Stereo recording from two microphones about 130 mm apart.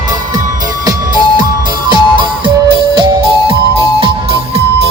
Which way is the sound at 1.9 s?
40° right (ahead or behind).